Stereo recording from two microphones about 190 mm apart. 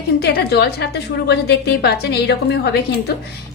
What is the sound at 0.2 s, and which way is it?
A woman's voice, 60° left (ahead or behind).